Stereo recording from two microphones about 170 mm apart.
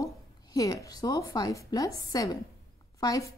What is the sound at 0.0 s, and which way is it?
A woman's voice, 20° left (ahead or behind).